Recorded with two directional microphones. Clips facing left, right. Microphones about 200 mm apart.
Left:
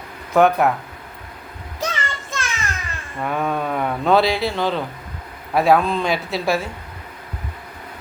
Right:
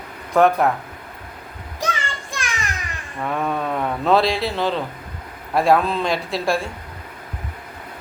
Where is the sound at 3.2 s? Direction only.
Centre (ahead or behind).